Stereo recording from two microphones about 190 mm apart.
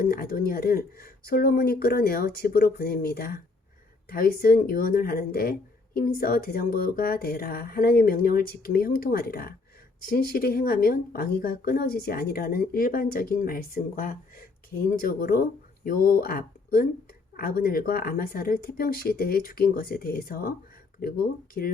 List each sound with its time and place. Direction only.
0.0 s speech: 50° left (ahead or behind)